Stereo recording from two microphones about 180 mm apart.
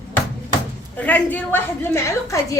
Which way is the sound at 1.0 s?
10° left (ahead or behind).